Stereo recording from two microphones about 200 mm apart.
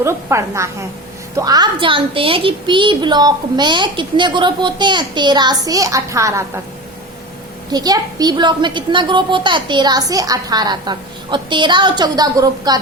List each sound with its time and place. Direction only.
0.0 s a woman's voice: 15° right (ahead or behind)
7.7 s a woman's voice: 20° right (ahead or behind)